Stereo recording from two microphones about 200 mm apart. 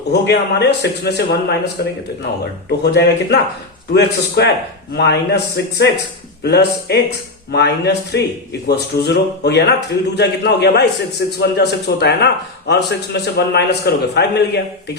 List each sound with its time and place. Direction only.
0.1 s a man's voice: 55° left (ahead or behind)